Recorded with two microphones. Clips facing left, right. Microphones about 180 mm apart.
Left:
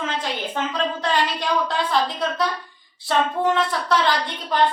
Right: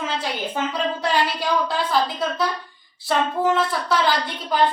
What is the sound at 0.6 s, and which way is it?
A woman's voice, 10° right (ahead or behind).